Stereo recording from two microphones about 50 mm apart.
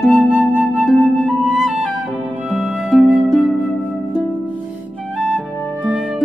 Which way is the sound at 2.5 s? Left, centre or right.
Centre.